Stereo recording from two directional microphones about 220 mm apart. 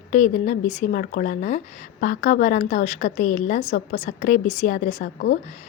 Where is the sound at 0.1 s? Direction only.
35° left (ahead or behind).